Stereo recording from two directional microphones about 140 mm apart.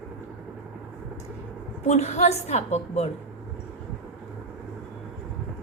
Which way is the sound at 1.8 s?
50° left (ahead or behind).